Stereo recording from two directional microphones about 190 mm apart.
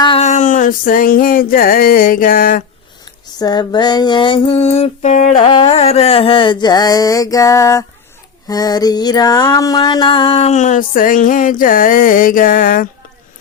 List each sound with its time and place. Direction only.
0.0 s music: 30° left (ahead or behind); by 2.6 s 45° left (ahead or behind)
3.3 s carnatic music: 20° left (ahead or behind); by 5.4 s 40° left (ahead or behind)
5.4 s carnatic music: 30° left (ahead or behind)
8.4 s music: 20° left (ahead or behind); by 12.9 s 45° left (ahead or behind)